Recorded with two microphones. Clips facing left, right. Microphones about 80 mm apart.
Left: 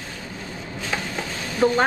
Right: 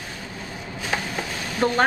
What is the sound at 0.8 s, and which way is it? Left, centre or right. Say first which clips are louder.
Stir: right 1 dB; right.